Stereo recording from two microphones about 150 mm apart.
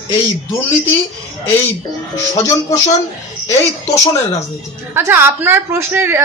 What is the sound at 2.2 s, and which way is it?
Speech, 20° left (ahead or behind).